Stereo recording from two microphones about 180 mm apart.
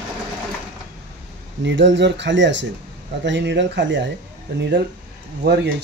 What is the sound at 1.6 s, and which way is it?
Speech, 90° right.